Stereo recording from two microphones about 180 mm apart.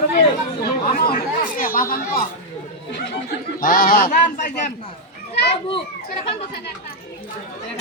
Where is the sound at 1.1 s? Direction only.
50° left (ahead or behind).